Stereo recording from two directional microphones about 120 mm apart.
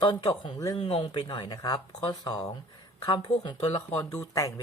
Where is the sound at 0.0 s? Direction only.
35° left (ahead or behind).